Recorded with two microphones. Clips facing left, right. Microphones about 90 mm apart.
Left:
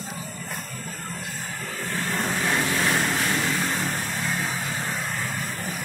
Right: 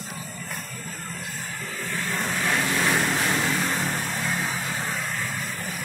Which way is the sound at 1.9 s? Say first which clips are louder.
Left 2 dB; 15° left (ahead or behind).